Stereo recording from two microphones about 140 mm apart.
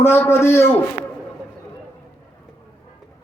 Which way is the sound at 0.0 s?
20° left (ahead or behind).